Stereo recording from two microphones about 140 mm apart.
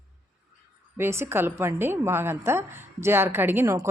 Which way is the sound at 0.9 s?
20° right (ahead or behind).